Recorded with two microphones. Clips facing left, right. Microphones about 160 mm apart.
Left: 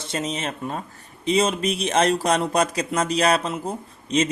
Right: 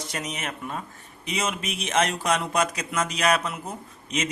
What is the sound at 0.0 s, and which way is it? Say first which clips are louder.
Speech: left 5 dB; 25° left (ahead or behind).